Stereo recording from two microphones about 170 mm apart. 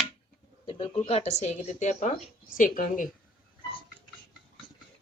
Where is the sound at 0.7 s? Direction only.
30° left (ahead or behind); by 3.1 s 50° left (ahead or behind).